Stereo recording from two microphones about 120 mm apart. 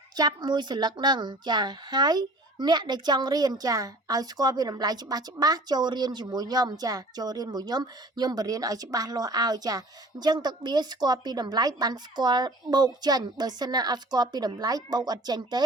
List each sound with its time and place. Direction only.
0.2 s speech: 35° right (ahead or behind)